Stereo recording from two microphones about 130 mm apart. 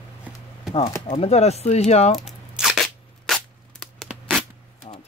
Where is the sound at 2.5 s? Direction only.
5° right (ahead or behind).